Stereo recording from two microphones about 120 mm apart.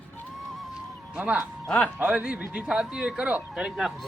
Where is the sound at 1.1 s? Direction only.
10° right (ahead or behind).